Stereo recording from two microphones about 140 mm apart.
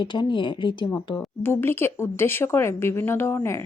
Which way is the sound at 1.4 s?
15° left (ahead or behind).